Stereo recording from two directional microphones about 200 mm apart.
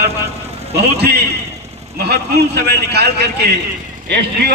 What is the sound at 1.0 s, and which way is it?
A man's voice, 55° right (ahead or behind).